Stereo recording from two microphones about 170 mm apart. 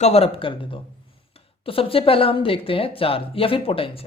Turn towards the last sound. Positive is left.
turn(degrees=35)  # may be behind; listen again after turning